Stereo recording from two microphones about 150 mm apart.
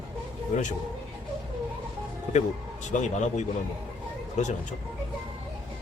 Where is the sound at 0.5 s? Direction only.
55° left (ahead or behind).